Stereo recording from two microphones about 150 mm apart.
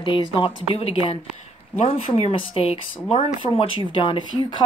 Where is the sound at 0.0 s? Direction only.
35° left (ahead or behind).